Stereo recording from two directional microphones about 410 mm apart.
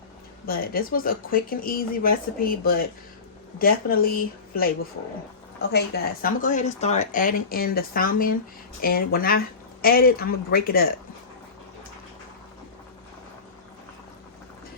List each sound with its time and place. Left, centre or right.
0.4 s speech: left
5.7 s speech: left